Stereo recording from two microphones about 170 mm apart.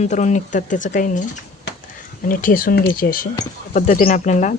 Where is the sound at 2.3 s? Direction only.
55° left (ahead or behind).